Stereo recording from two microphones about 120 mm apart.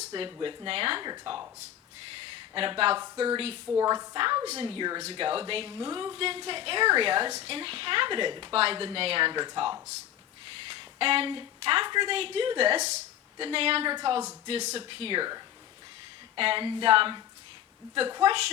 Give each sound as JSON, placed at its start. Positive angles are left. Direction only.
{"t": 0.1, "sound": "speech", "side_deg": -40}
{"t": 2.1, "sound": "a sound", "side_deg": -50}
{"t": 3.3, "sound": "a woman's voice", "side_deg": -50}
{"t": 3.8, "sound": "speech", "side_deg": -30}
{"t": 5.0, "sound": "a woman's voice", "side_deg": -50}
{"t": 13.4, "sound": "a woman's voice", "side_deg": -50}
{"t": 13.9, "sound": "speech", "side_deg": -40}
{"t": 14.4, "sound": "a woman's voice", "side_deg": -60}